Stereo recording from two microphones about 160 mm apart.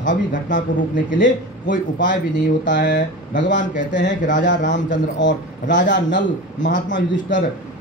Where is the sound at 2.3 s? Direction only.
90° left; by 3.6 s 55° left (ahead or behind).